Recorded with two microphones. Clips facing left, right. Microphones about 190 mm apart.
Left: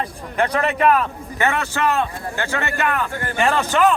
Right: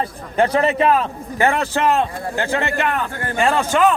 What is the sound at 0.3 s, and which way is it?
A man's voice, 30° right (ahead or behind).